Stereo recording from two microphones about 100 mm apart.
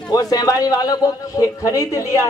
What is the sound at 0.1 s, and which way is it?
A woman's voice, 40° left (ahead or behind).